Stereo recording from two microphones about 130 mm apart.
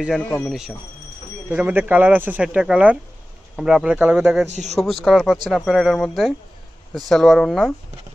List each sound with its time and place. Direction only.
0.2 s speech: 15° left (ahead or behind)
0.5 s speech: 5° right (ahead or behind)
4.5 s speech: 60° right (ahead or behind)
4.7 s speech: centre (ahead or behind)